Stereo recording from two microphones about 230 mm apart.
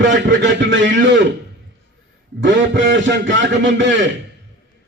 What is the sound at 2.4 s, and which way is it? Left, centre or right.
A man's voice, right.